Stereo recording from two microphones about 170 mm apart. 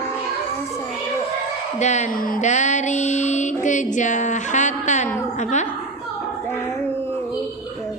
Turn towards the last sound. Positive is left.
turn(degrees=15)  # may be behind; listen again after turning